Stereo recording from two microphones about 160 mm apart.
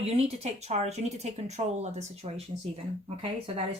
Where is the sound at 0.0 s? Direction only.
40° right (ahead or behind).